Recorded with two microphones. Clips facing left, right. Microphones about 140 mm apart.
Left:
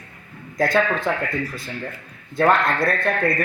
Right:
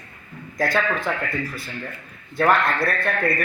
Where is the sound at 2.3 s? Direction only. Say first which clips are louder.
Left 1 dB; 25° left (ahead or behind).